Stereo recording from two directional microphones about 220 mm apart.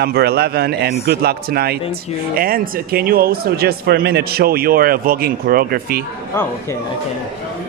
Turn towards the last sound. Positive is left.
turn(degrees=10)  # may be behind; listen again after turning